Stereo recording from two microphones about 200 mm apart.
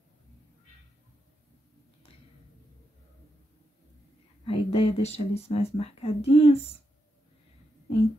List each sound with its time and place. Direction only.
4.5 s speech: 30° left (ahead or behind)